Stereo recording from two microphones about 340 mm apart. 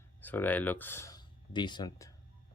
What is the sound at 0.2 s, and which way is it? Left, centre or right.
Speech, centre.